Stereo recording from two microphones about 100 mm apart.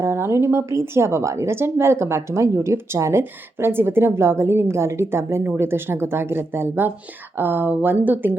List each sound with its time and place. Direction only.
0.0 s a woman's voice: 30° right (ahead or behind)